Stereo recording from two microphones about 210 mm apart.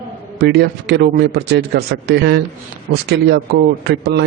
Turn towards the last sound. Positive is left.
turn(degrees=-50)  # may be behind; listen again after turning